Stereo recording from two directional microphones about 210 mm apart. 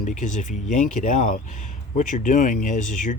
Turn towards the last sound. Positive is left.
turn(degrees=40)  # may be behind; listen again after turning